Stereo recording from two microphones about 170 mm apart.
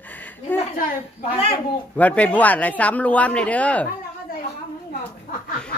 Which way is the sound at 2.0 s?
10° left (ahead or behind).